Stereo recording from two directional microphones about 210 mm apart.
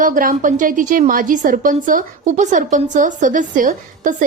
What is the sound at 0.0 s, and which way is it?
A woman's voice, 40° right (ahead or behind).